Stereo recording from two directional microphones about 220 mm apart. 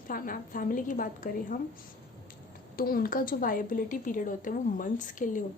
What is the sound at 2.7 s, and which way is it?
Speech, 40° left (ahead or behind).